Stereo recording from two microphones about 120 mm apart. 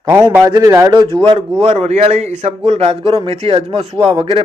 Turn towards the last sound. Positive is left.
turn(degrees=-50)  # may be behind; listen again after turning